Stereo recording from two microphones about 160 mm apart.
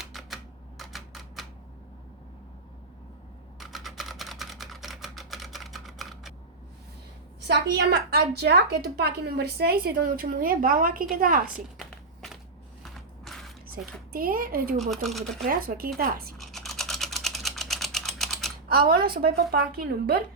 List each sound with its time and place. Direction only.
0.0 s typewriter: centre (ahead or behind)
3.6 s typing: centre (ahead or behind)
7.4 s a woman's voice: 85° right; by 11.5 s 60° right (ahead or behind)
11.8 s a sound: centre (ahead or behind)
14.1 s speech: 65° right (ahead or behind)
14.8 s speech: centre (ahead or behind)
15.4 s a woman's voice: 65° right (ahead or behind)
16.4 s typing: centre (ahead or behind)
18.7 s a woman's voice: 70° right (ahead or behind)